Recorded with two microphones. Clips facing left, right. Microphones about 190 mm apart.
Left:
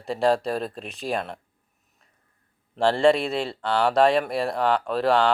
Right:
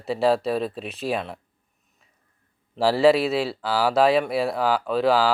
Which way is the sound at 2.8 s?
5° right (ahead or behind).